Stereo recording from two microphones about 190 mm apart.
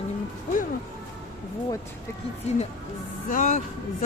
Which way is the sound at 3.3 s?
45° left (ahead or behind).